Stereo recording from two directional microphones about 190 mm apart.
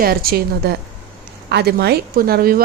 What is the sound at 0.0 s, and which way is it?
Speech, 50° right (ahead or behind).